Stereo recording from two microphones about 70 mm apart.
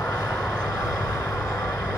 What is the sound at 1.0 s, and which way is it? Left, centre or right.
Vehicle, left.